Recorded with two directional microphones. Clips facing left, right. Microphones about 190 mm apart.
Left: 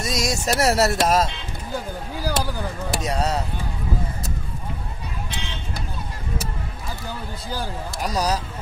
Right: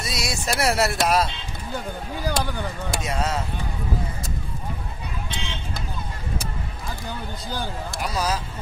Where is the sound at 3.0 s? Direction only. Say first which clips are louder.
Left 3 dB; 35° left (ahead or behind).